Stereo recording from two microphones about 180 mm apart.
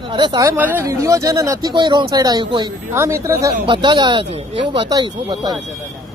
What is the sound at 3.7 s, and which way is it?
Speech, 25° right (ahead or behind).